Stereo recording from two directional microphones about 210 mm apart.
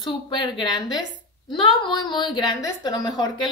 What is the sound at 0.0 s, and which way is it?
A woman's voice, 20° left (ahead or behind).